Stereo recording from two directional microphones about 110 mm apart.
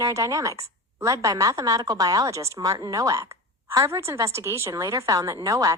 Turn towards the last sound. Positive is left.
turn(degrees=-30)  # may be behind; listen again after turning